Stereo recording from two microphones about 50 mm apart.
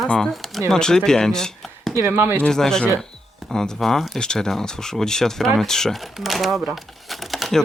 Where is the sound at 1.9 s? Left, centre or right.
Right.